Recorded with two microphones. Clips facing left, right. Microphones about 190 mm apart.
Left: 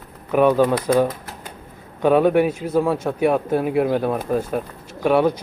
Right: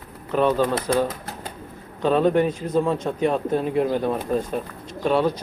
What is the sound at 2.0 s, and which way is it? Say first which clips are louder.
Speech: left 3 dB; 10° left (ahead or behind).